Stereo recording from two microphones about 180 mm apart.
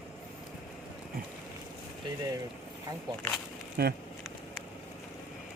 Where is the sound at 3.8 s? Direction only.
60° right (ahead or behind).